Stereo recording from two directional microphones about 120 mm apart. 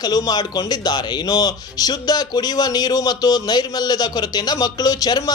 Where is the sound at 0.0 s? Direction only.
35° left (ahead or behind).